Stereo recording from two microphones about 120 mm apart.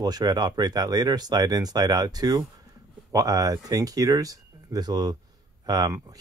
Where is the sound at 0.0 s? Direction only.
35° right (ahead or behind).